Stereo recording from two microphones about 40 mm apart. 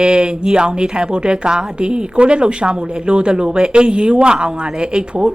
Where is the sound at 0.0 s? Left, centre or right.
Right.